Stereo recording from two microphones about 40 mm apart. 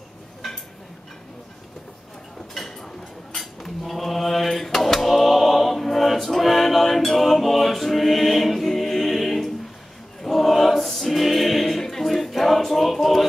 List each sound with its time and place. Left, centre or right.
2.5 s a sound: centre
3.3 s mantra: centre
10.2 s choir: centre